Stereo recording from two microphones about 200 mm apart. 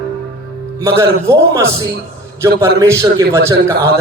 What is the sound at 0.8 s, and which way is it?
Speech, 15° right (ahead or behind).